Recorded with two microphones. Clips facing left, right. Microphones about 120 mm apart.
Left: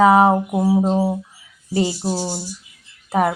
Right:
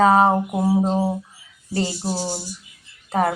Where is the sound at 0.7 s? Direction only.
Centre (ahead or behind).